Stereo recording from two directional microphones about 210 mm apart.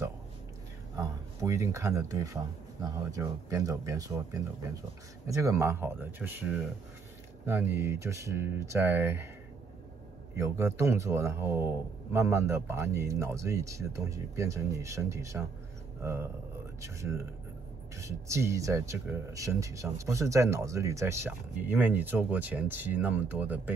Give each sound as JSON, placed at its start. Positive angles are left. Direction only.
{"t": 0.9, "sound": "speech", "side_deg": -15}
{"t": 10.3, "sound": "speech", "side_deg": -15}